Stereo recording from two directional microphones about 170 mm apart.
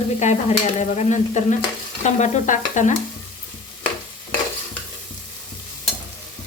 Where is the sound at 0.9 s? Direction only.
45° left (ahead or behind).